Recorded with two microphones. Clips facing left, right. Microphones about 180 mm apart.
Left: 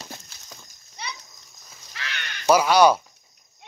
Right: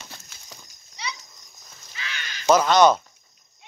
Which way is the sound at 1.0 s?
55° left (ahead or behind).